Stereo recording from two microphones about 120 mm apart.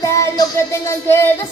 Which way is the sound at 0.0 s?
25° left (ahead or behind).